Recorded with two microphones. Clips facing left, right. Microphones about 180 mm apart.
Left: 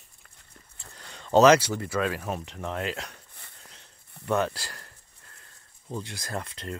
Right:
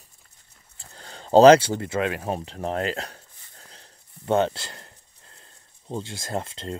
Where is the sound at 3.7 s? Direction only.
30° right (ahead or behind).